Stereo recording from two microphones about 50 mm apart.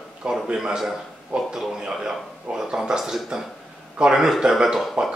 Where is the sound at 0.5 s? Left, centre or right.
Centre.